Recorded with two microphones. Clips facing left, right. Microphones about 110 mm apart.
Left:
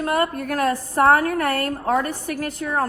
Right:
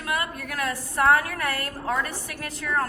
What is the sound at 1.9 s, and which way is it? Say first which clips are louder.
Speech: left 5 dB; 45° left (ahead or behind).